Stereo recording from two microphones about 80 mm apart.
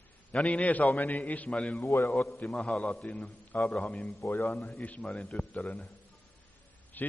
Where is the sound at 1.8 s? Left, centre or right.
Left.